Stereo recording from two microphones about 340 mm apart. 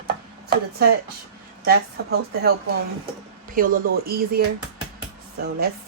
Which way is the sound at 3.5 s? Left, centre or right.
Right.